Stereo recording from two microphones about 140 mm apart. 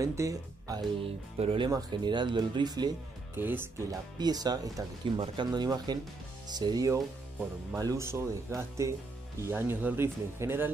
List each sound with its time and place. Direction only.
0.0 s speech: 20° right (ahead or behind)
1.0 s speech: 40° right (ahead or behind)
1.7 s speech: 30° right (ahead or behind)
3.3 s speech: 15° right (ahead or behind)
4.2 s speech: 30° right (ahead or behind)